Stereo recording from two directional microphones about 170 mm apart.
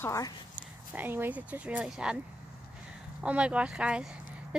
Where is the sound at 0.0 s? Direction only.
20° left (ahead or behind).